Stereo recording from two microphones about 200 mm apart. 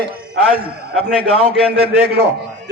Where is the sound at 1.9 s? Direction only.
55° right (ahead or behind).